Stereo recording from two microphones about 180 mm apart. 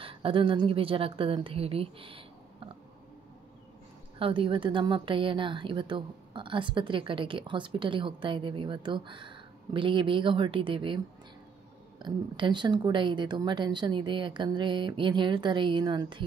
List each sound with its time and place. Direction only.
0.0 s a woman's voice: 30° right (ahead or behind)
4.2 s a woman's voice: 30° right (ahead or behind)
12.0 s a woman's voice: 25° right (ahead or behind)